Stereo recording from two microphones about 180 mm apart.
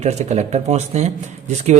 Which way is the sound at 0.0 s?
40° right (ahead or behind).